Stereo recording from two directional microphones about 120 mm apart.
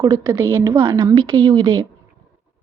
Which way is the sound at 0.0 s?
35° right (ahead or behind).